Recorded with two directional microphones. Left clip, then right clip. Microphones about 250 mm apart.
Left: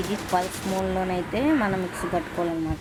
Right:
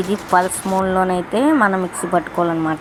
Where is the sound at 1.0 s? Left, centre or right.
Centre.